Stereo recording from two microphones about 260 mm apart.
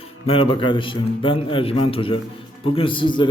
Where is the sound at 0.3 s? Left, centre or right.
Centre.